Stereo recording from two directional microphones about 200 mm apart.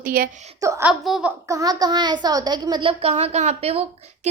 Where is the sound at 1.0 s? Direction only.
Centre (ahead or behind).